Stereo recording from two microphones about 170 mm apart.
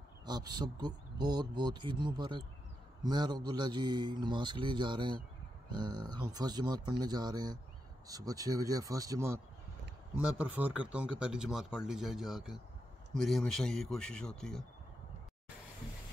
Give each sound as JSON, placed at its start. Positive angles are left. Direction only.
{"t": 0.2, "sound": "a man's voice", "side_deg": -25}